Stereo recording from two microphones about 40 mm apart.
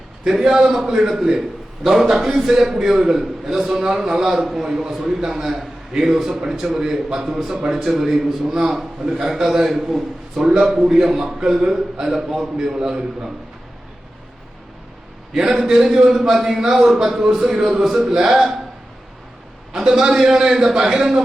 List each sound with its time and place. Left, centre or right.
0.3 s a man's voice: centre
10.5 s a man's voice: centre
10.8 s a man's voice: centre
15.3 s a man's voice: centre
19.8 s a man's voice: centre
20.1 s a man's voice: centre